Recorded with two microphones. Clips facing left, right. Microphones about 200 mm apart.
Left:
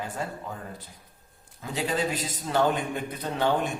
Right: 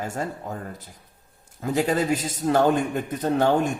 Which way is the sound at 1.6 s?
45° right (ahead or behind).